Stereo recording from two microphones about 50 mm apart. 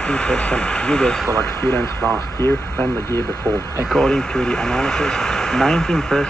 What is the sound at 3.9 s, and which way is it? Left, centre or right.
Speech, centre.